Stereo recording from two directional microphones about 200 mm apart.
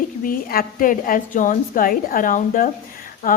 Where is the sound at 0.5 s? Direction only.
45° left (ahead or behind).